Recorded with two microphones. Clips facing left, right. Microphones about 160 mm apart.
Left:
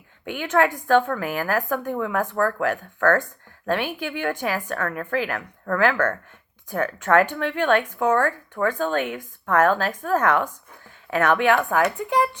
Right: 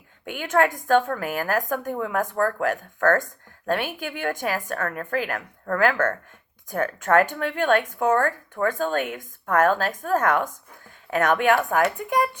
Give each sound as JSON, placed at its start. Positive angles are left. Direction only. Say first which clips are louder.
{"t": 0.3, "sound": "speech", "louder": "left 1 dB", "side_deg": -45}